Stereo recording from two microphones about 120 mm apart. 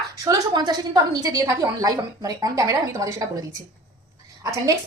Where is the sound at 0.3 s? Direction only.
35° right (ahead or behind).